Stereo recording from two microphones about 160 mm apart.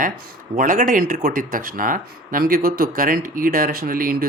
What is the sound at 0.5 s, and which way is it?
Speech, 55° right (ahead or behind).